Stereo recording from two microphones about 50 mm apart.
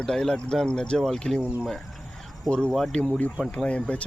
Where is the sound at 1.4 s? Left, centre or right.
Right.